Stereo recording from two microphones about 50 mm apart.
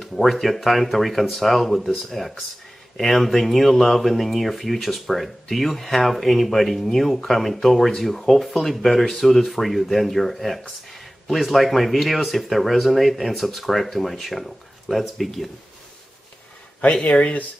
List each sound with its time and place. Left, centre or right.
0.0 s speech: centre
16.8 s speech: left